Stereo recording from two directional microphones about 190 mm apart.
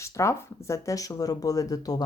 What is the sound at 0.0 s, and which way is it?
Speech, 15° left (ahead or behind).